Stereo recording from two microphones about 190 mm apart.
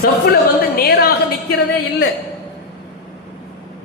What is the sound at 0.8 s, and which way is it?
Speech, 55° left (ahead or behind).